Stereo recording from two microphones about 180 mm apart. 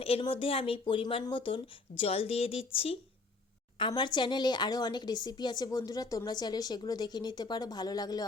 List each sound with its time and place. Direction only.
0.0 s speech: 30° left (ahead or behind)